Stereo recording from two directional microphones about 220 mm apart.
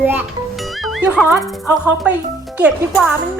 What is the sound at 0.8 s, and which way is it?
A child's voice, 5° right (ahead or behind).